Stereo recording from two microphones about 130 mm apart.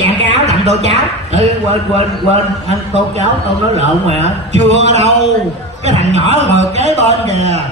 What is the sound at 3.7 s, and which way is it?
A man's voice, 55° right (ahead or behind).